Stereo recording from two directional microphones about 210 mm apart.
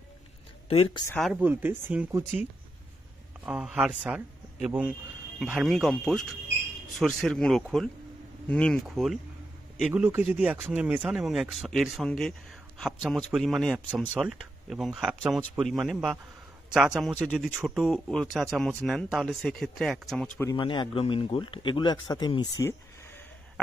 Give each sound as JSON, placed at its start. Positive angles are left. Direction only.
{"t": 0.7, "sound": "speech", "side_deg": 25}
{"t": 1.0, "sound": "speech", "side_deg": 10}
{"t": 1.3, "sound": "speech", "side_deg": -10}
{"t": 3.4, "sound": "speech", "side_deg": -5}
{"t": 20.3, "sound": "speech", "side_deg": 20}